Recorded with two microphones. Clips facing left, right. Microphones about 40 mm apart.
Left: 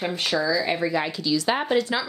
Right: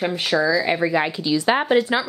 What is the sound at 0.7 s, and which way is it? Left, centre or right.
Speech, right.